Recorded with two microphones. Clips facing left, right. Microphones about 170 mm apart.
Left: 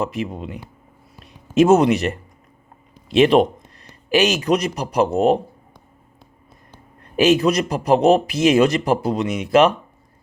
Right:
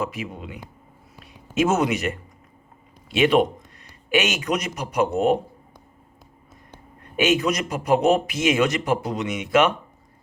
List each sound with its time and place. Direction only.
0.2 s a man's voice: 35° left (ahead or behind)
1.2 s a sound: 35° left (ahead or behind)
3.2 s a man's voice: 35° left (ahead or behind)
7.2 s a man's voice: 35° left (ahead or behind)